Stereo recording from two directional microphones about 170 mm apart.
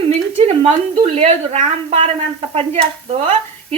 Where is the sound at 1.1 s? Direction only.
40° right (ahead or behind).